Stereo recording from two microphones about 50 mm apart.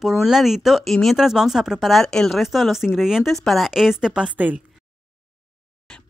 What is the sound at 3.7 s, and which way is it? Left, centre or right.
Speech, centre.